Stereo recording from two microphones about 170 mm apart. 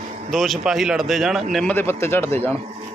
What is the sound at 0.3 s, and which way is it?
A man's voice, centre (ahead or behind).